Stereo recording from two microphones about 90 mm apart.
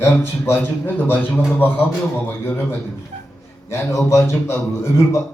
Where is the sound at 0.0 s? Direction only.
25° left (ahead or behind).